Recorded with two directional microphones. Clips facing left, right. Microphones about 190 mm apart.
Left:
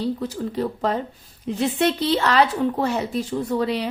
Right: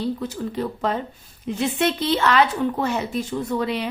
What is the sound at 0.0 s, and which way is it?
A woman's voice, 35° left (ahead or behind).